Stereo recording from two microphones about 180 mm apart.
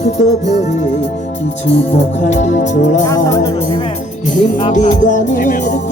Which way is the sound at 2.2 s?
40° left (ahead or behind).